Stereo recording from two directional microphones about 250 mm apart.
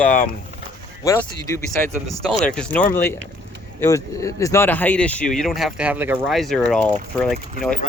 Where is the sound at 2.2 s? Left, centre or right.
Centre.